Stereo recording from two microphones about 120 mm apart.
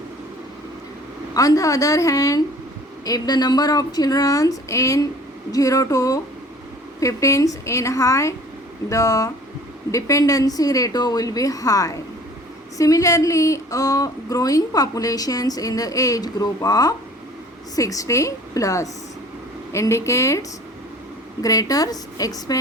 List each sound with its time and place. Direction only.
1.3 s speech: 30° left (ahead or behind)
21.4 s speech: 30° left (ahead or behind)